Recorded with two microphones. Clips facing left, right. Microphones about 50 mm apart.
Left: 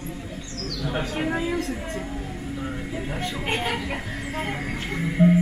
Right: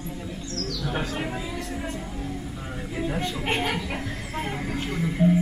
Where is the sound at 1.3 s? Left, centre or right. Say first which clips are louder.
Left 7 dB; left.